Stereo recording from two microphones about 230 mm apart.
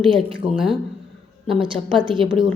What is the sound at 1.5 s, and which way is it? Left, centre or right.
Speech, right.